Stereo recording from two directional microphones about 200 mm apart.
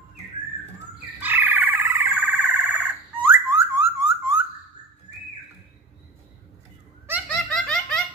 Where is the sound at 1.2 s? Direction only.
10° right (ahead or behind).